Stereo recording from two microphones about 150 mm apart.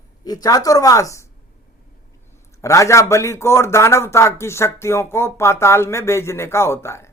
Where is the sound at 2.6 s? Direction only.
20° left (ahead or behind).